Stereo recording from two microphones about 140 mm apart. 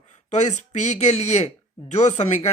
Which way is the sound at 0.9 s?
55° left (ahead or behind).